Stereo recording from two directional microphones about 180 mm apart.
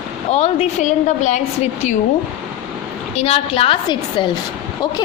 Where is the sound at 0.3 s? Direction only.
35° left (ahead or behind).